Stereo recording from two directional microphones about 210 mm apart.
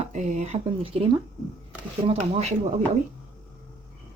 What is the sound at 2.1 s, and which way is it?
Speech, 30° right (ahead or behind).